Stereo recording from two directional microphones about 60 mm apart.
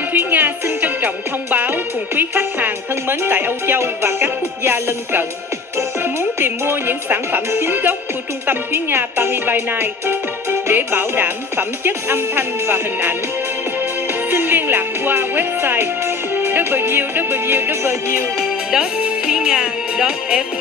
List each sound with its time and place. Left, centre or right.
0.1 s music: right
14.3 s music: right
18.7 s speech: centre